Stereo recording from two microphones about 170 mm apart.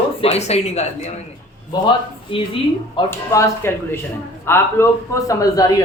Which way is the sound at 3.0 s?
15° left (ahead or behind).